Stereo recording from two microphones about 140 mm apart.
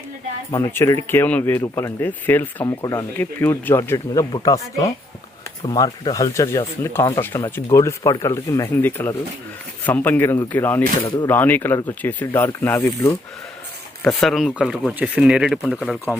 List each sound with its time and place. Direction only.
0.5 s speech: 20° left (ahead or behind)
2.6 s speech: 25° left (ahead or behind)
3.2 s speech: 15° left (ahead or behind)
14.2 s speech: centre (ahead or behind)